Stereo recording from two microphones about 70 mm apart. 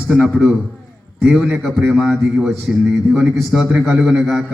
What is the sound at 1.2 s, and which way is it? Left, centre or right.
A man's voice, centre.